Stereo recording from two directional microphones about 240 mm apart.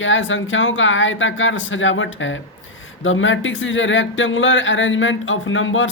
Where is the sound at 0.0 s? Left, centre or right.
Left.